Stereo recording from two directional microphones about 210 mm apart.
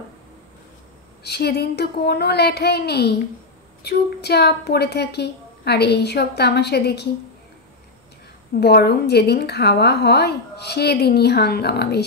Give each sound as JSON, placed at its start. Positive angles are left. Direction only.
{"t": 1.2, "sound": "a woman's voice", "side_deg": 50}
{"t": 8.5, "sound": "a woman's voice", "side_deg": 50}